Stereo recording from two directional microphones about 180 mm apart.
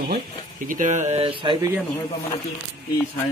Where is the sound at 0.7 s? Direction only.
45° right (ahead or behind); by 1.6 s 30° right (ahead or behind).